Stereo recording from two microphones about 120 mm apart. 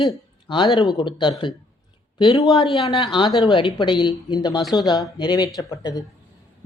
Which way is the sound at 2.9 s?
40° left (ahead or behind).